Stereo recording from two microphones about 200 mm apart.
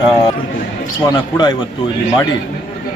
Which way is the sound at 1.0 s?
20° left (ahead or behind).